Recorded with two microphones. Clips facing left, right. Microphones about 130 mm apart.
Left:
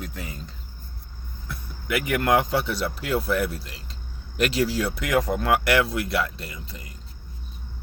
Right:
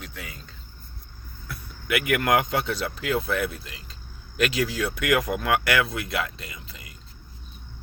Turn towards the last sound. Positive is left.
turn(degrees=35)  # may be behind; listen again after turning